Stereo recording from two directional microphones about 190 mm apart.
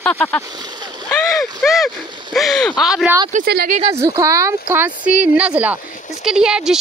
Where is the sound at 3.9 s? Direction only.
15° right (ahead or behind).